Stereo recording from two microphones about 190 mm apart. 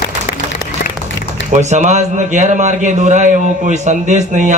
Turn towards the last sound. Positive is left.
turn(degrees=-40)  # may be behind; listen again after turning